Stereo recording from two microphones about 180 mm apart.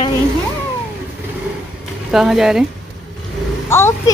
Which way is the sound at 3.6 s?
15° left (ahead or behind).